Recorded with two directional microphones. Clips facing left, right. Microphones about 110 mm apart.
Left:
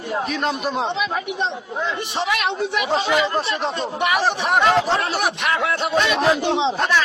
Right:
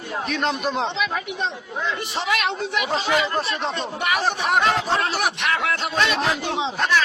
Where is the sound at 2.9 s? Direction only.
25° left (ahead or behind).